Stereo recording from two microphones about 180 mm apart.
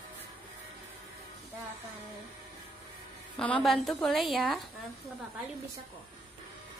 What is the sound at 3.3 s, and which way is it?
A woman's voice, 5° left (ahead or behind).